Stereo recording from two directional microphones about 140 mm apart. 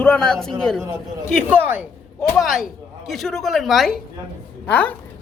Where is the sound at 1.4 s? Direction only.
15° right (ahead or behind).